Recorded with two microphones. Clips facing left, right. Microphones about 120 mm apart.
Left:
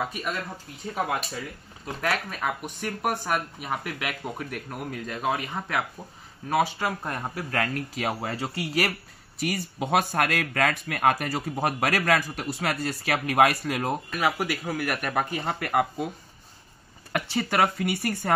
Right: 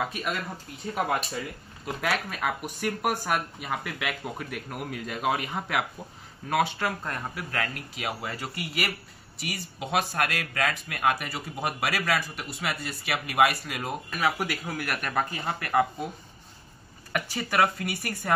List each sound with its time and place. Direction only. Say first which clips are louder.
0.0 s speech: even; centre (ahead or behind)
7.0 s speech: left 2 dB; 20° left (ahead or behind)
7.5 s speech: left 6 dB; 35° left (ahead or behind)
9.4 s speech: left 7 dB; 50° left (ahead or behind)
14.4 s speech: left 3 dB; centre (ahead or behind)
15.1 s speech: left 2 dB; 20° left (ahead or behind)
17.1 s speech: left 3 dB; 25° left (ahead or behind)